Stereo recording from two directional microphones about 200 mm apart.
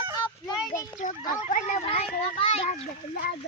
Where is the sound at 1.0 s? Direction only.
40° left (ahead or behind).